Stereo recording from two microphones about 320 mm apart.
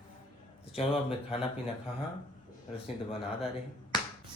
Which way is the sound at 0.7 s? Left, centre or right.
Centre.